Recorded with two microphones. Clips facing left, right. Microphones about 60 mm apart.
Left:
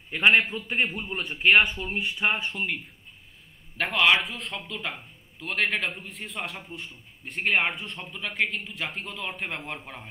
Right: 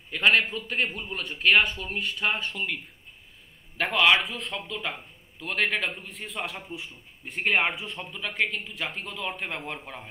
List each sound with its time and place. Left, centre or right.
0.1 s a man's voice: centre